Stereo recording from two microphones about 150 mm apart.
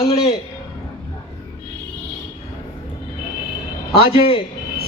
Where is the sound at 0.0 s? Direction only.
45° left (ahead or behind).